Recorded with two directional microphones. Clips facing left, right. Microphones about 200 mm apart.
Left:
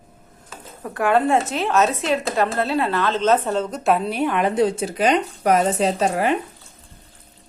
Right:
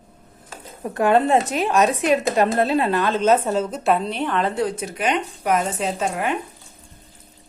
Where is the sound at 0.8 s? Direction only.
20° right (ahead or behind); by 6.3 s 35° left (ahead or behind).